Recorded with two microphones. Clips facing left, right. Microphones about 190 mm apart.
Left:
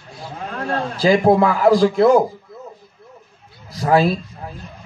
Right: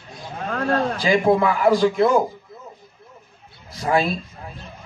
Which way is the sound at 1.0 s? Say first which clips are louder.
Left 6 dB; 35° left (ahead or behind).